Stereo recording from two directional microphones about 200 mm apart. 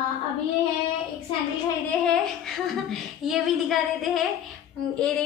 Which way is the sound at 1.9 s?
5° left (ahead or behind).